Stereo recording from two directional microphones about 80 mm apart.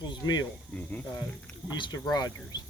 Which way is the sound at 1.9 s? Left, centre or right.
Left.